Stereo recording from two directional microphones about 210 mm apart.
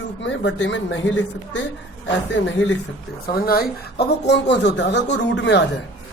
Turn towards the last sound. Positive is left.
turn(degrees=55)  # may be behind; listen again after turning